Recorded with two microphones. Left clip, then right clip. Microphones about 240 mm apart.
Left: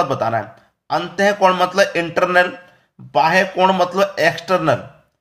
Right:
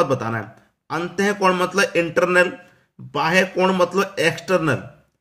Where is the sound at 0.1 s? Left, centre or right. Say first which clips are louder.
Left 4 dB; centre.